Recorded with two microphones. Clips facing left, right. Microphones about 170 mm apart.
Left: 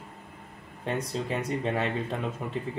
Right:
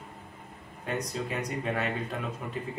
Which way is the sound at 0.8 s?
30° left (ahead or behind).